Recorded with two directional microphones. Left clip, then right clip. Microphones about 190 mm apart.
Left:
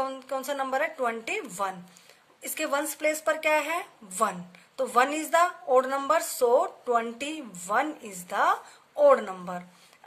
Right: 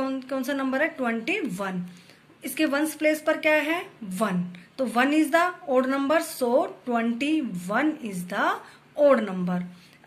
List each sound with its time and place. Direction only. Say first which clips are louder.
0.0 s speech: right 2 dB; 65° left (ahead or behind)